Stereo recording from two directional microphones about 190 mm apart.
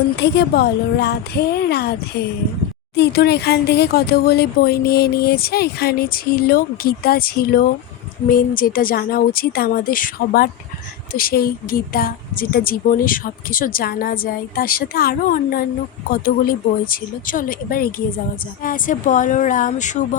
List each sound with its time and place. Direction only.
0.2 s speech: 60° left (ahead or behind); by 20.1 s 40° left (ahead or behind)